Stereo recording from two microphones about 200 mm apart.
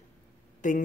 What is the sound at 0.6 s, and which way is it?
Speech, 40° left (ahead or behind).